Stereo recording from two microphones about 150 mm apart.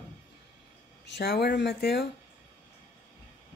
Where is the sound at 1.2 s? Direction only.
90° left.